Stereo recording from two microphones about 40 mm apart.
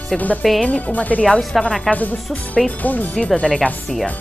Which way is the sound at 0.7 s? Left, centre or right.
Left.